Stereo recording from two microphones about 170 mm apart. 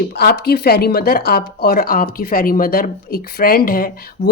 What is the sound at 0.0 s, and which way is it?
Speech, 70° left (ahead or behind).